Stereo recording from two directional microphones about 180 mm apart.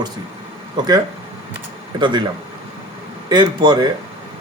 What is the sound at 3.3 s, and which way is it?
Speech, 25° right (ahead or behind).